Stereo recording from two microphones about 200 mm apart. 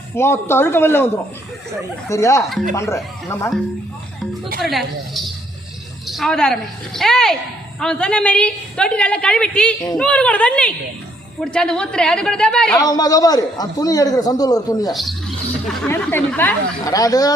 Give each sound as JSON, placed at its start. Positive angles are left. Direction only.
{"t": 0.1, "sound": "speech", "side_deg": 10}
{"t": 2.0, "sound": "speech", "side_deg": 15}
{"t": 4.6, "sound": "a woman's voice", "side_deg": 0}
{"t": 12.7, "sound": "a man's voice", "side_deg": 20}
{"t": 14.9, "sound": "speech", "side_deg": 0}